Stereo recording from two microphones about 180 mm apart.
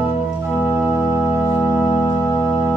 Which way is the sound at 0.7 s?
15° right (ahead or behind).